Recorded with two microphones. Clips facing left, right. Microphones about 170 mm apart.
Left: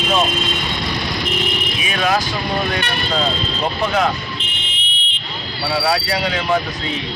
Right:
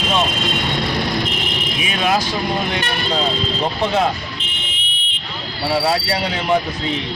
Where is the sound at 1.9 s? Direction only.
25° right (ahead or behind).